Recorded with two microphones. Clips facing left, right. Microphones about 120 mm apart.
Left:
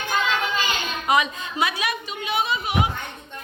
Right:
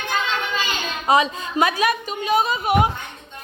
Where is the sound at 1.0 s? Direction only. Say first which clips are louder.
Right 4 dB; 35° right (ahead or behind).